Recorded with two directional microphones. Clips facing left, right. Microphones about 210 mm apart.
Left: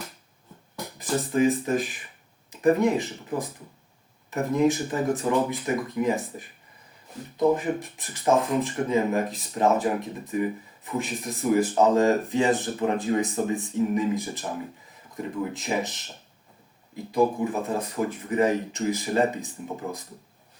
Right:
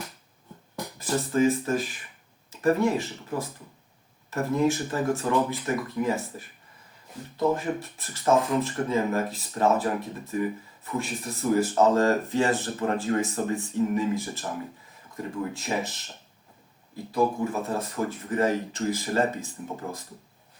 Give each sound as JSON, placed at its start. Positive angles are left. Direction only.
{"t": 0.9, "sound": "speech", "side_deg": 15}